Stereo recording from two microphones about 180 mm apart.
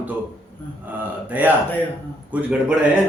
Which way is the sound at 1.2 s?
10° right (ahead or behind).